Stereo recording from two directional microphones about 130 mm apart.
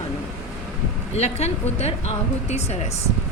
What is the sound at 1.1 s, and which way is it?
A woman's voice, 55° left (ahead or behind).